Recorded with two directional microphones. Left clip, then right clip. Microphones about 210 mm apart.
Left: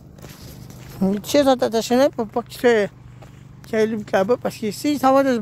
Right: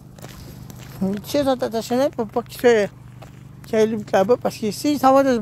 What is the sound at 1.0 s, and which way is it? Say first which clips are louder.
Speech: left 4 dB; 45° left (ahead or behind).